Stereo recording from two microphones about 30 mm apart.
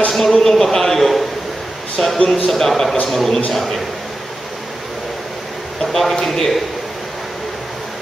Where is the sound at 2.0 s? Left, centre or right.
Centre.